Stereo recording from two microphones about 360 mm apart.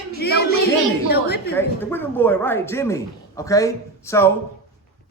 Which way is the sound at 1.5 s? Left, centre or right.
Centre.